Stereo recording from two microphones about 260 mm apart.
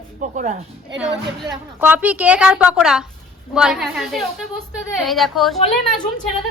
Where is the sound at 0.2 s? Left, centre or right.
Right.